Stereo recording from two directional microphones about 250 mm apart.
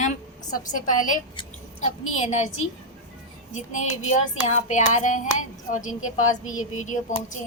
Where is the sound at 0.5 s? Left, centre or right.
Left.